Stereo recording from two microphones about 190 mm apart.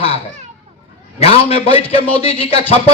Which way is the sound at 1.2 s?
30° left (ahead or behind).